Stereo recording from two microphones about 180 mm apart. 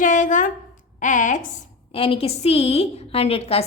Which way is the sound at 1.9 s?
30° left (ahead or behind).